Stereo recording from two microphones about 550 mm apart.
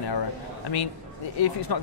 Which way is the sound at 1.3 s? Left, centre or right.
Left.